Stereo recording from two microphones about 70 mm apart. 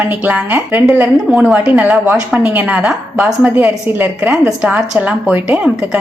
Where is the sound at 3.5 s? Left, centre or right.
Right.